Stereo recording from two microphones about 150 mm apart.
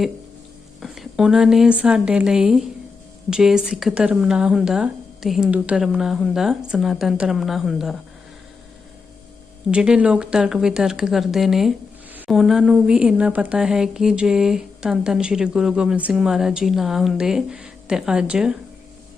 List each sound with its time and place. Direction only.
0.8 s speech: centre (ahead or behind)
9.7 s speech: 5° right (ahead or behind)